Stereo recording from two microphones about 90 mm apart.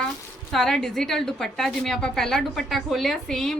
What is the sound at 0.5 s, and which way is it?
A woman's voice, 5° left (ahead or behind).